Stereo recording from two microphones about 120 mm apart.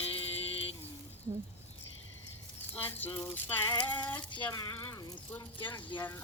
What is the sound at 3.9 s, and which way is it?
Speech, 35° left (ahead or behind).